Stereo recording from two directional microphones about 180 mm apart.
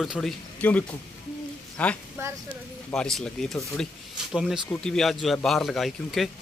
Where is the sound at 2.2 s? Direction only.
15° right (ahead or behind).